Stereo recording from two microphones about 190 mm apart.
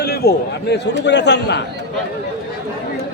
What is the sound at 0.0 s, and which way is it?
A man's voice, 55° left (ahead or behind).